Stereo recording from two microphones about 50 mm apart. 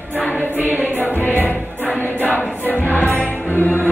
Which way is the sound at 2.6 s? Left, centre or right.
Left.